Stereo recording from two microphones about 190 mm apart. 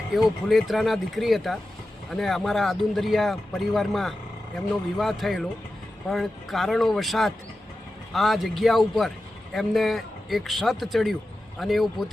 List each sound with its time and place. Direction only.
0.4 s speech: centre (ahead or behind)